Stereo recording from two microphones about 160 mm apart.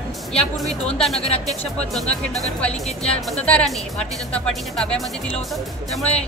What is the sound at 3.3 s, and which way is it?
Speech, 5° left (ahead or behind).